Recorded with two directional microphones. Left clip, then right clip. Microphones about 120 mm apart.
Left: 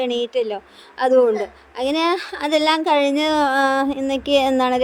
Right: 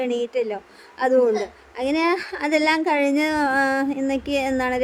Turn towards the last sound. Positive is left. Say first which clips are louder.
# left 6 dB
turn(degrees=20)  # may be behind; listen again after turning